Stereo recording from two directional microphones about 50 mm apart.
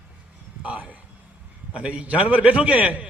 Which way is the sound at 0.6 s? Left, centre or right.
Right.